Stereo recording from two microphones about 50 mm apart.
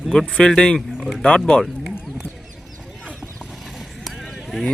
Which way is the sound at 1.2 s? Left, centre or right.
Centre.